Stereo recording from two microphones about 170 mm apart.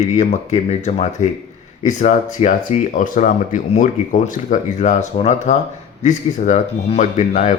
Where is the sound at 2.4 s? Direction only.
45° left (ahead or behind).